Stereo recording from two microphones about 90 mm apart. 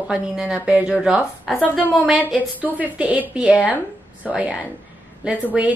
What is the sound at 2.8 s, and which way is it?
A woman's voice, 15° right (ahead or behind).